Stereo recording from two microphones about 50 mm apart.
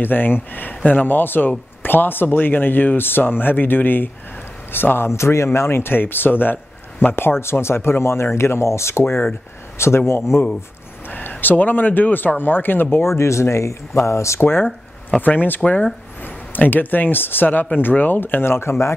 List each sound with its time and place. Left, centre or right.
0.0 s a man's voice: left
5.1 s speech: left
11.1 s a man's voice: left
12.9 s speech: left
14.4 s a man's voice: left